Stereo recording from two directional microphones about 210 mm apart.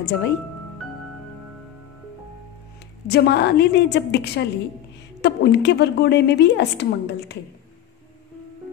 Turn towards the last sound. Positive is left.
turn(degrees=55)  # may be behind; listen again after turning